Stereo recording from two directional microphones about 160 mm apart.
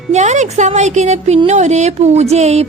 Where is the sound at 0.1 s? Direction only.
45° right (ahead or behind).